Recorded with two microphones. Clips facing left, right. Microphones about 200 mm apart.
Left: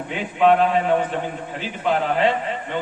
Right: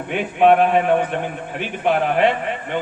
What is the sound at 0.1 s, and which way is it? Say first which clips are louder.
A man's voice: right 3 dB; 60° right (ahead or behind).